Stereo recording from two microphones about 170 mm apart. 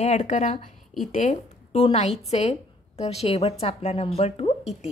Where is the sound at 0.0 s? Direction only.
40° left (ahead or behind).